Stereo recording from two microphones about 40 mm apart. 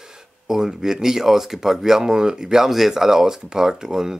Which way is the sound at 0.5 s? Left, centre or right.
Centre.